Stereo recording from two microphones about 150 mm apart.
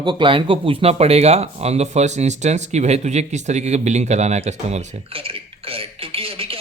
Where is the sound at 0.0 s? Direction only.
30° right (ahead or behind).